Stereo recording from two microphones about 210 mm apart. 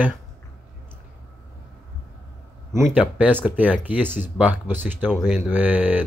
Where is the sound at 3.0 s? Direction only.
5° right (ahead or behind).